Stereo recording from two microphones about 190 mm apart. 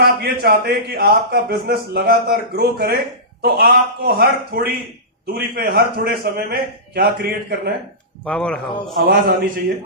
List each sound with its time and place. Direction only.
0.0 s a man's voice: 55° right (ahead or behind)
8.2 s speech: 5° left (ahead or behind)
9.0 s a man's voice: 55° right (ahead or behind)